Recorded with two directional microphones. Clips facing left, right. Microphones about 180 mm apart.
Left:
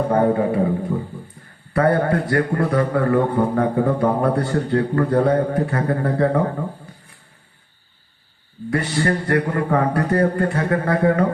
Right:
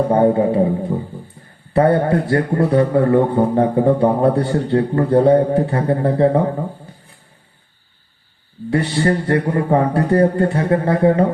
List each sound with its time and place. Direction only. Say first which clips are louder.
0.1 s a man's voice: right 2 dB; 25° right (ahead or behind)
1.7 s a man's voice: right 3 dB; 25° right (ahead or behind)
8.7 s a man's voice: right 3 dB; 25° right (ahead or behind)